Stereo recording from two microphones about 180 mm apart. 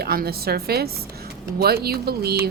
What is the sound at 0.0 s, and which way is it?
A woman's voice, 55° right (ahead or behind).